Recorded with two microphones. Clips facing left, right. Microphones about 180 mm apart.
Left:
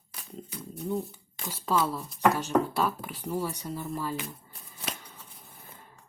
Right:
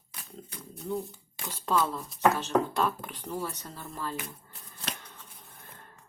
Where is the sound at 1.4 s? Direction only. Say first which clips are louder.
Even; 5° left (ahead or behind).